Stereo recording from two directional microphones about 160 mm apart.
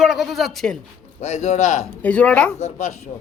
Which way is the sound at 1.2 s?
45° left (ahead or behind).